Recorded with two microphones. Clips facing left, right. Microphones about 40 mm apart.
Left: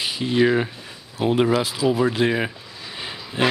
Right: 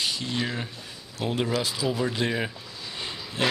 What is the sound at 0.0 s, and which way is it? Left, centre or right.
Speech, centre.